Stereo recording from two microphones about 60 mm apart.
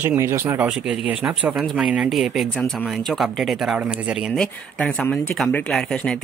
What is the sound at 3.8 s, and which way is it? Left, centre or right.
Speech, centre.